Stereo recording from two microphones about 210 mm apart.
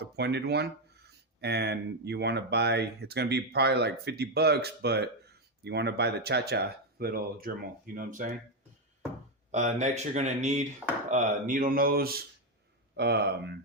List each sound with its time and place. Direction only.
0.0 s speech: 50° right (ahead or behind)
9.5 s speech: 35° right (ahead or behind); by 13.5 s 50° right (ahead or behind)